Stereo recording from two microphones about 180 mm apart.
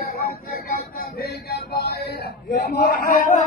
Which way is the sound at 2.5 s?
60° left (ahead or behind).